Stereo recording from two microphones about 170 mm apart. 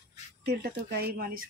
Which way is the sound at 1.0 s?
60° right (ahead or behind).